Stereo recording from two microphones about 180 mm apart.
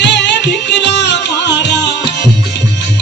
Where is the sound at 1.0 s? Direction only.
75° left (ahead or behind).